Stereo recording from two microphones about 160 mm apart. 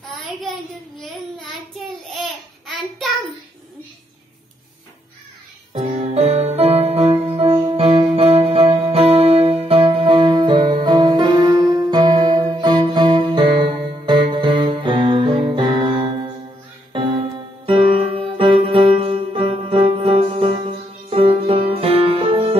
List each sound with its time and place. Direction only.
1.0 s child singing: centre (ahead or behind)
5.7 s music: 40° right (ahead or behind)